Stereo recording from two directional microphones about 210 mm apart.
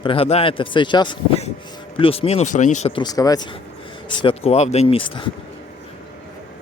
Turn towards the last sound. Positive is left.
turn(degrees=25)  # may be behind; listen again after turning